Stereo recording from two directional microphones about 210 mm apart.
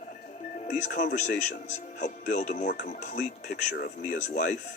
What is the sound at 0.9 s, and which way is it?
Speech, 40° left (ahead or behind).